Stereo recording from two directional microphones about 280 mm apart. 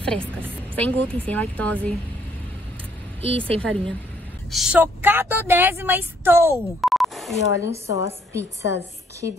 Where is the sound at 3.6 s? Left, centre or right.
Centre.